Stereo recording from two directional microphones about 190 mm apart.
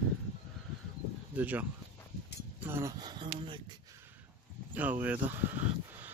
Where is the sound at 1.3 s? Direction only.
10° right (ahead or behind).